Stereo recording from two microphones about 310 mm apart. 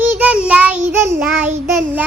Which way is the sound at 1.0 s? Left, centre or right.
Right.